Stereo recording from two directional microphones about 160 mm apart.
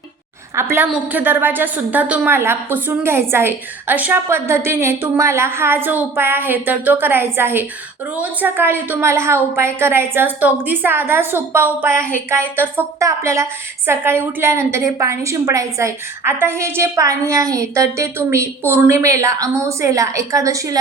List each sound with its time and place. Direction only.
0.5 s a woman's voice: 15° right (ahead or behind)